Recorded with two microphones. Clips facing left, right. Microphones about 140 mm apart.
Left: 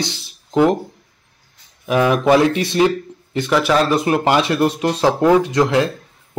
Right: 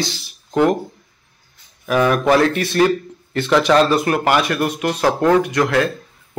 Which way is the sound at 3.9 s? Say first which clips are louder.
Left 1 dB; 20° left (ahead or behind).